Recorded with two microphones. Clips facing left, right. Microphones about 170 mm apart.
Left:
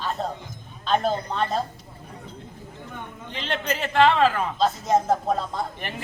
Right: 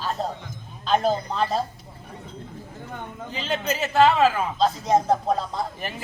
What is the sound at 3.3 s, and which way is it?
Speech, 5° right (ahead or behind).